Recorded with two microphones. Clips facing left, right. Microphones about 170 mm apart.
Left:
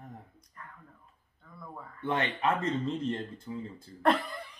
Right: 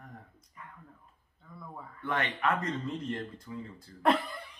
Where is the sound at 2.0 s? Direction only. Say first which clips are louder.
Left 2 dB; 25° left (ahead or behind).